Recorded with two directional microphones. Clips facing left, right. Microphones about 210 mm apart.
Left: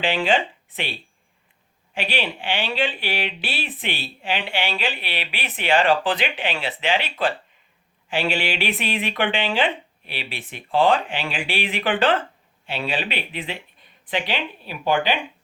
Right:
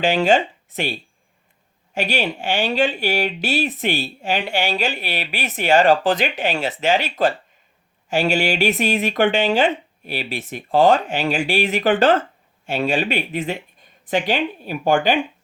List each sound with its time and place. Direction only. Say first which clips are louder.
0.0 s speech: right 5 dB; 45° right (ahead or behind)